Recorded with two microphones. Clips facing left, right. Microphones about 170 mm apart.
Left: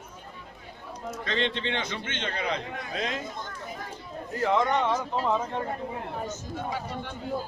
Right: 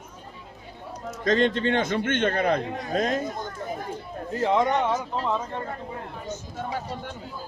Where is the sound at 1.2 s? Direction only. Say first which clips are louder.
Right 8 dB; 45° right (ahead or behind).